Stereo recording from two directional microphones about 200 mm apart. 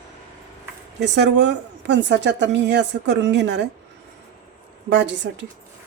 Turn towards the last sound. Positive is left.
turn(degrees=-60)  # may be behind; listen again after turning